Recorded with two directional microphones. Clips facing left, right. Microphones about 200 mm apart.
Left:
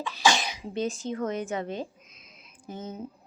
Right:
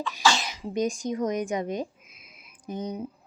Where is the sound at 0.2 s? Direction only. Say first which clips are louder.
Left 1 dB; 15° left (ahead or behind).